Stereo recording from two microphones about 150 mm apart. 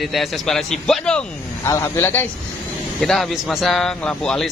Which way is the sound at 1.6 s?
20° left (ahead or behind).